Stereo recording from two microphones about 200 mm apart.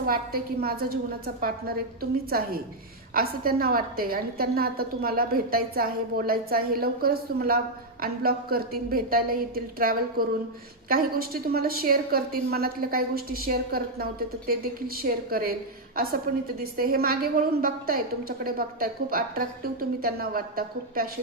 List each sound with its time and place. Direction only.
0.0 s a woman's voice: 50° right (ahead or behind)
16.7 s a woman's voice: 50° right (ahead or behind)